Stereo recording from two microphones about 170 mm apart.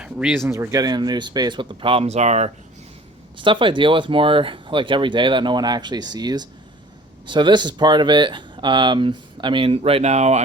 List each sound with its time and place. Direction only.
0.0 s speech: 5° right (ahead or behind)
0.4 s speech: 15° right (ahead or behind); by 2.5 s 40° right (ahead or behind)
3.3 s speech: 30° right (ahead or behind)